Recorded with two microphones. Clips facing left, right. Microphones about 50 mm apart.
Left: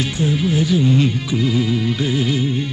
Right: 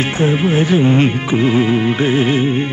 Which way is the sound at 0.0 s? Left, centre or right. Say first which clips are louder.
Right 4 dB; right.